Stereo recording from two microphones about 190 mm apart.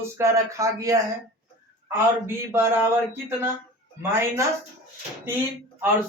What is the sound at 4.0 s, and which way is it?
Speech, 15° right (ahead or behind).